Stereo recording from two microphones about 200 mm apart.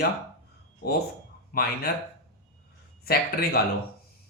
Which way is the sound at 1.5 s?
45° left (ahead or behind).